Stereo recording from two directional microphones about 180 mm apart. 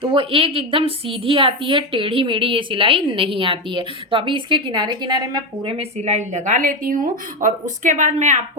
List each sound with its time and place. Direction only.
0.0 s a woman's voice: 30° right (ahead or behind)